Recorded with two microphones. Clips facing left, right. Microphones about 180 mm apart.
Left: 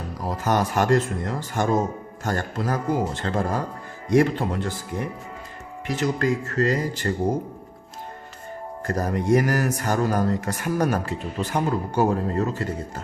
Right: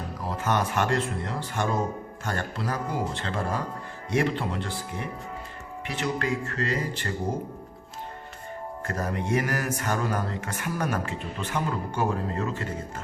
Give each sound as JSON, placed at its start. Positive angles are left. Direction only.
{"t": 0.3, "sound": "speech", "side_deg": 40}
{"t": 5.9, "sound": "speech", "side_deg": 40}
{"t": 8.9, "sound": "speech", "side_deg": 35}